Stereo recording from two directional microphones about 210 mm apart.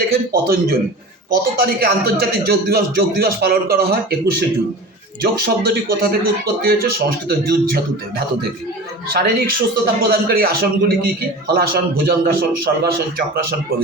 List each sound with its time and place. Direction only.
0.1 s a man's voice: 45° right (ahead or behind)
7.3 s a man's voice: 45° right (ahead or behind)